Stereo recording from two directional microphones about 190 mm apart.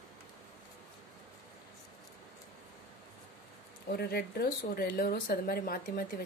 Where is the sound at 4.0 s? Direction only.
55° left (ahead or behind).